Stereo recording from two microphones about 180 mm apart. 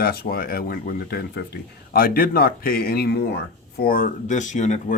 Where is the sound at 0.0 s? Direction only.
60° left (ahead or behind).